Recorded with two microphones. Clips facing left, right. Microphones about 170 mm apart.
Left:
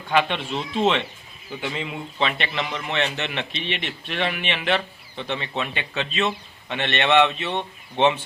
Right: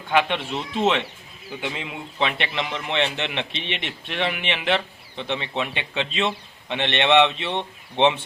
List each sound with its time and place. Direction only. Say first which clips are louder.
0.1 s a man's voice: even; 15° right (ahead or behind)